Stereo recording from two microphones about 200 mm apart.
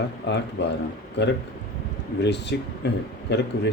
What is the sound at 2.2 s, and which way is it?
Speech, 60° left (ahead or behind).